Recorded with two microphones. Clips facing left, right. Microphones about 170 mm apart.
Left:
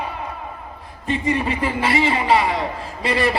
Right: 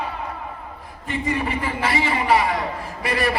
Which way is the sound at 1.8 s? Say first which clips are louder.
Left 2 dB; 20° left (ahead or behind).